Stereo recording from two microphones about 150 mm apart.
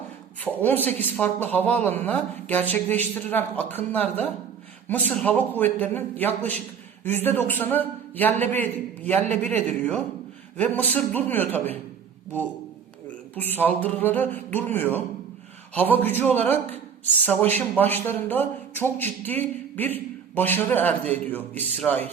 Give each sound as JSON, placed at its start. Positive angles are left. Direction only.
{"t": 0.4, "sound": "speech", "side_deg": 10}
{"t": 13.3, "sound": "speech", "side_deg": 10}